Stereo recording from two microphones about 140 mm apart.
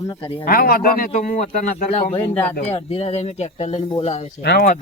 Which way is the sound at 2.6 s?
45° left (ahead or behind).